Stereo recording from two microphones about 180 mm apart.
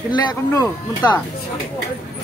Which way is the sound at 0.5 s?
20° left (ahead or behind).